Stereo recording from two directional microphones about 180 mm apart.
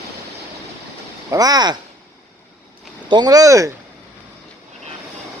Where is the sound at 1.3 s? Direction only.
20° right (ahead or behind).